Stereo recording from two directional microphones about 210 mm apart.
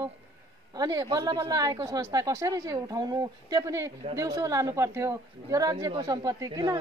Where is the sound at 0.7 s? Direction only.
15° right (ahead or behind).